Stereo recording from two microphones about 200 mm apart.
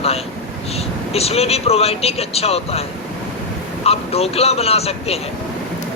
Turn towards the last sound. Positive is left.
turn(degrees=30)  # may be behind; listen again after turning